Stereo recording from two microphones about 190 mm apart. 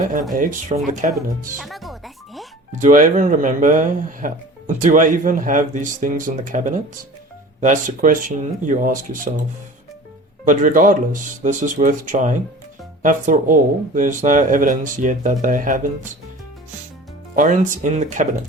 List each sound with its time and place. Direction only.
0.0 s speech: 45° right (ahead or behind)
1.5 s music: centre (ahead or behind)
2.7 s speech: 40° right (ahead or behind)
10.4 s speech: 40° right (ahead or behind)
17.3 s speech: 45° right (ahead or behind)